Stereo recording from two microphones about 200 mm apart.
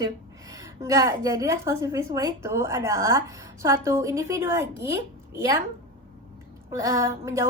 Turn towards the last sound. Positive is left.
turn(degrees=-15)  # may be behind; listen again after turning